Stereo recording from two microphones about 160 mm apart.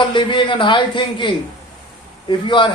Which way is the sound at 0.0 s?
30° left (ahead or behind).